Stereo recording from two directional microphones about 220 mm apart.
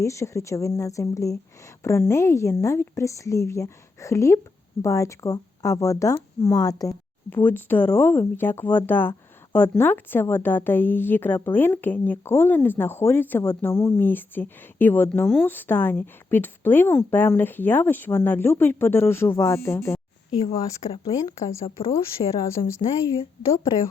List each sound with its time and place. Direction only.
0.0 s speech: 15° left (ahead or behind)